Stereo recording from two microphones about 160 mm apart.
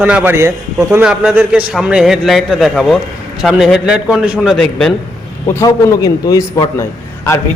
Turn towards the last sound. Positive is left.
turn(degrees=15)  # may be behind; listen again after turning